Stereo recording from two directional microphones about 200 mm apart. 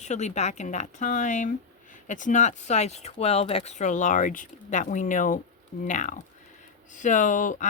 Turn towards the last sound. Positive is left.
turn(degrees=40)  # may be behind; listen again after turning